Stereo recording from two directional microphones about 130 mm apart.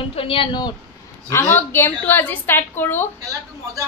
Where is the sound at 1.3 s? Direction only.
15° left (ahead or behind).